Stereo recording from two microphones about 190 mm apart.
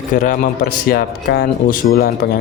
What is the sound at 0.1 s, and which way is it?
Speech, 45° left (ahead or behind).